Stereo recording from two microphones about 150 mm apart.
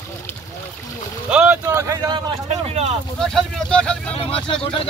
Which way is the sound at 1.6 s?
20° right (ahead or behind).